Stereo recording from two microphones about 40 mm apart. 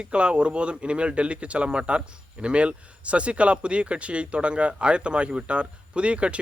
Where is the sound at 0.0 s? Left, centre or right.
Right.